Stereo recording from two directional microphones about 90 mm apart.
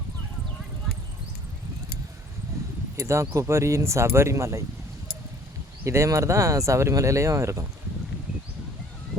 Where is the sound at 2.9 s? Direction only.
35° right (ahead or behind).